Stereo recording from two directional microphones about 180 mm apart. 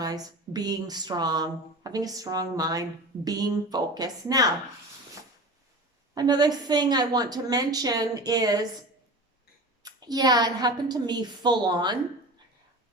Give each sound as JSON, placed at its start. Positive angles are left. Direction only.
{"t": 0.0, "sound": "speech", "side_deg": -20}
{"t": 6.1, "sound": "speech", "side_deg": -20}
{"t": 9.8, "sound": "speech", "side_deg": -20}